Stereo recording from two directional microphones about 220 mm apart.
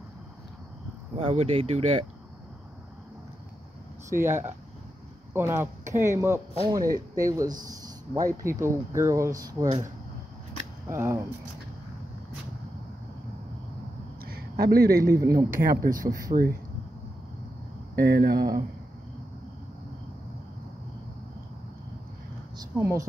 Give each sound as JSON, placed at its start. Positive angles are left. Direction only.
{"t": 1.1, "sound": "speech", "side_deg": -25}
{"t": 4.1, "sound": "speech", "side_deg": -10}
{"t": 10.9, "sound": "speech", "side_deg": -10}
{"t": 14.2, "sound": "a sound", "side_deg": -45}
{"t": 15.1, "sound": "speech", "side_deg": -15}
{"t": 15.6, "sound": "speech", "side_deg": -40}
{"t": 17.9, "sound": "speech", "side_deg": -45}
{"t": 22.6, "sound": "a sound", "side_deg": -15}